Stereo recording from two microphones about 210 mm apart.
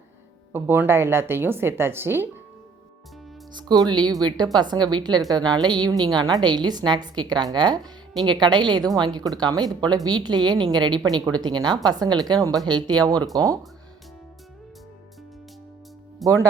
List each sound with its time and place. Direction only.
0.5 s speech: 10° right (ahead or behind)
3.5 s speech: 20° right (ahead or behind)
16.2 s speech: 15° right (ahead or behind)